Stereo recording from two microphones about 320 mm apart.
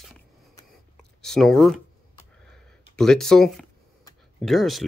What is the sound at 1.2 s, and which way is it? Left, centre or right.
Speech, centre.